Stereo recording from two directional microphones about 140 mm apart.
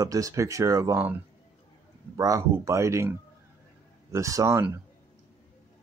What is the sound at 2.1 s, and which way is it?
Speech, 25° right (ahead or behind).